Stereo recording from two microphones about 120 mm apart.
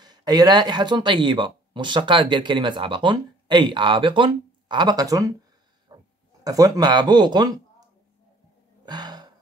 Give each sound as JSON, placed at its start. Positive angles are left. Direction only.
{"t": 0.0, "sound": "speech", "side_deg": -35}
{"t": 5.9, "sound": "pig", "side_deg": -30}
{"t": 6.4, "sound": "speech", "side_deg": -30}
{"t": 8.8, "sound": "gasp", "side_deg": -35}